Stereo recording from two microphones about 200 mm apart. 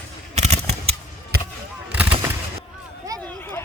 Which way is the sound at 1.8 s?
5° right (ahead or behind).